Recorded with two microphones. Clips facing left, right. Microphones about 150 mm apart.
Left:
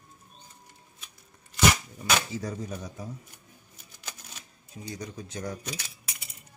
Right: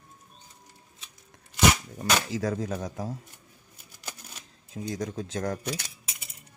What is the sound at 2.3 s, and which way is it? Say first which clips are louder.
Speech: right 5 dB; 90° right.